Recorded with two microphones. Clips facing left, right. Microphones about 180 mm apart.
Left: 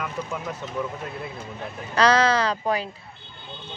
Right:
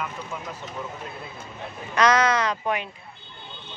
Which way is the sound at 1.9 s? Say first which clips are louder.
Left 1 dB; 35° left (ahead or behind).